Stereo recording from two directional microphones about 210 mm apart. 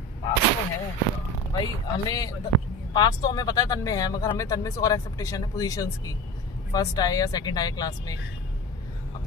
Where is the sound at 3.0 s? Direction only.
20° left (ahead or behind).